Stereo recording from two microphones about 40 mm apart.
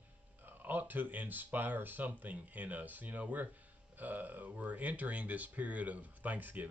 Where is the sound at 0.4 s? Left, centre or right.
Right.